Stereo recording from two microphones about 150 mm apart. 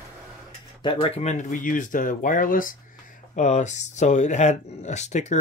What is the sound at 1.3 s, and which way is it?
Speech, 65° left (ahead or behind).